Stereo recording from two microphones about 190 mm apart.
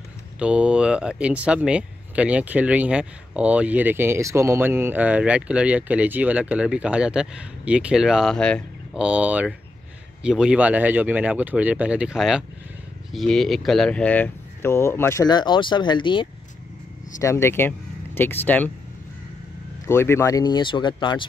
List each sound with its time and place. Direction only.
0.4 s speech: 5° right (ahead or behind)
9.0 s speech: 5° right (ahead or behind); by 16.3 s 25° left (ahead or behind)
17.2 s speech: 15° left (ahead or behind)
19.9 s speech: 15° left (ahead or behind)